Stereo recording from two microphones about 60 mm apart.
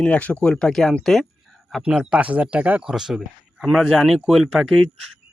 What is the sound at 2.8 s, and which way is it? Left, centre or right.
Speech, centre.